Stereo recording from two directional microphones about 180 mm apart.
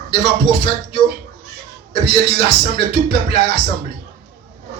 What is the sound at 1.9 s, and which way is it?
Speech, 30° left (ahead or behind).